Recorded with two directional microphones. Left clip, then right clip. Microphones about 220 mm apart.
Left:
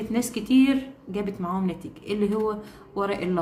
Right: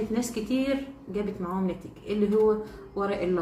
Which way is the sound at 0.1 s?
40° left (ahead or behind).